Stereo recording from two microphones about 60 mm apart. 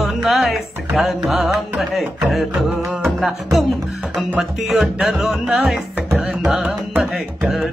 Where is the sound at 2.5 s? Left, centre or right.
Right.